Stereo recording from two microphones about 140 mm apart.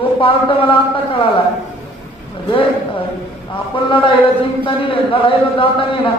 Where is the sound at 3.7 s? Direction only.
40° left (ahead or behind).